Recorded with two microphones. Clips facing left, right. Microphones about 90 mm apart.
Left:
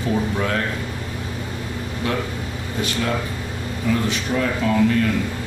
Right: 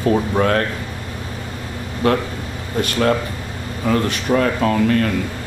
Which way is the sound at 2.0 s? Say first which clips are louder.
Right 7 dB; 50° right (ahead or behind).